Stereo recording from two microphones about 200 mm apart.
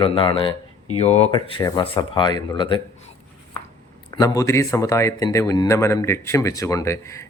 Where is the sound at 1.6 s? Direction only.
20° left (ahead or behind).